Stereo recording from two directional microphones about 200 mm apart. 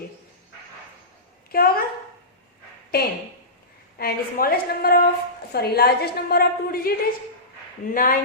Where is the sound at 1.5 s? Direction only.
50° left (ahead or behind).